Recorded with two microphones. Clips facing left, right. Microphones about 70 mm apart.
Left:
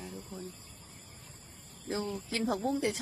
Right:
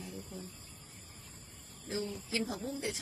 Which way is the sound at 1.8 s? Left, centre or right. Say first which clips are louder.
Left 3 dB; left.